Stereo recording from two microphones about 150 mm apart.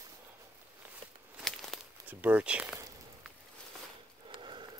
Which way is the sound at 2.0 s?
10° right (ahead or behind).